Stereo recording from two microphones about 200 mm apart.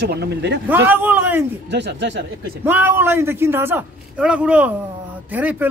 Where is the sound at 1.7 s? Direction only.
60° right (ahead or behind).